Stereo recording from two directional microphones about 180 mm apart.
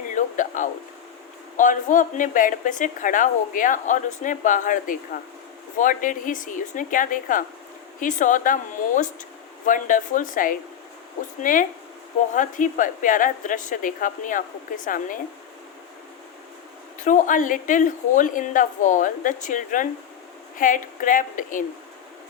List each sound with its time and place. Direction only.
0.1 s a sound: 45° left (ahead or behind)
1.5 s a woman's voice: 45° left (ahead or behind)
17.0 s a woman's voice: 45° left (ahead or behind)